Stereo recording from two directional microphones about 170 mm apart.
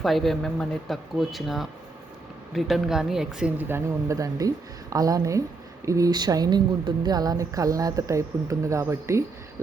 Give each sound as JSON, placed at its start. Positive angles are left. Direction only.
{"t": 0.0, "sound": "speech", "side_deg": 0}